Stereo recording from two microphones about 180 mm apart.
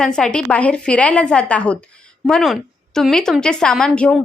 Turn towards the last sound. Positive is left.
turn(degrees=5)  # may be behind; listen again after turning